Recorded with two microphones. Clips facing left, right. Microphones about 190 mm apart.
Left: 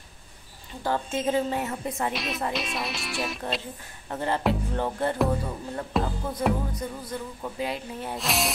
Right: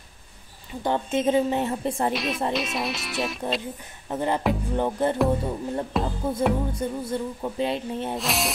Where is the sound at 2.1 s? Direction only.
Centre (ahead or behind).